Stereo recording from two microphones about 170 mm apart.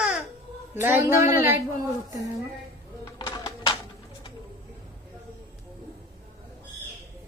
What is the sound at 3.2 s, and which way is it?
Music, 25° left (ahead or behind).